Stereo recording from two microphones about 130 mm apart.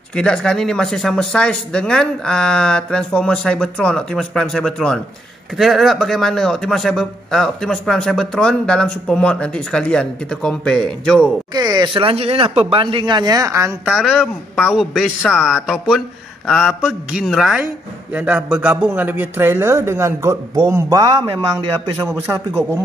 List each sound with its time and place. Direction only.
0.1 s a man's voice: 5° left (ahead or behind)
11.5 s speech: 35° right (ahead or behind)
13.8 s a man's voice: 5° right (ahead or behind); by 21.9 s 35° right (ahead or behind)
22.0 s a man's voice: 15° right (ahead or behind)